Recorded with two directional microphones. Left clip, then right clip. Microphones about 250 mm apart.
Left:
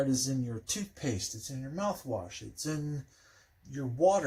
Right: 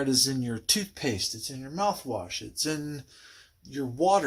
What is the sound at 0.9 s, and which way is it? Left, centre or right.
Speech, right.